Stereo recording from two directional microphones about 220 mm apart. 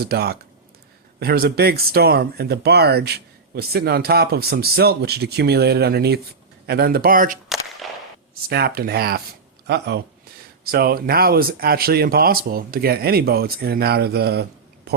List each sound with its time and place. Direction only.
0.0 s speech: 45° right (ahead or behind)
7.8 s a sound: centre (ahead or behind)
8.4 s speech: 45° right (ahead or behind)